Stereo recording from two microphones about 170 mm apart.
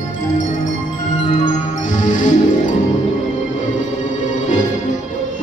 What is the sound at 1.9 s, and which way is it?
Music, 45° left (ahead or behind).